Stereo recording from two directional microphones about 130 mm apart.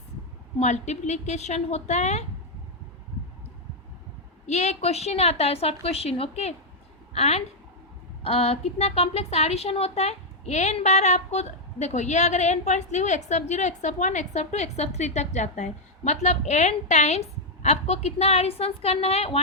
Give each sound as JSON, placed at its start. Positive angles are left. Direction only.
{"t": 0.6, "sound": "a woman's voice", "side_deg": 60}
{"t": 4.4, "sound": "a woman's voice", "side_deg": 60}